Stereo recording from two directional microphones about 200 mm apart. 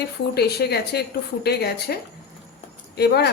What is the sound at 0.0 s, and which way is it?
A woman's voice, 55° left (ahead or behind).